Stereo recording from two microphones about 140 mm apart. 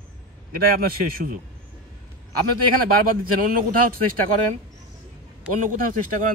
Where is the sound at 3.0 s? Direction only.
85° right.